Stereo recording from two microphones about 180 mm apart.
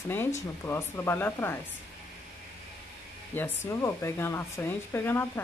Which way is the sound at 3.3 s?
15° left (ahead or behind).